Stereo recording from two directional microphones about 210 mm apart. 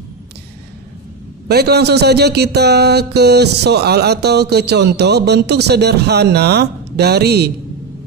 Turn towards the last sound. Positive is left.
turn(degrees=-50)  # may be behind; listen again after turning